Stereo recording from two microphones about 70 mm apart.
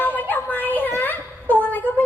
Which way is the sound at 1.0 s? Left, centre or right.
Left.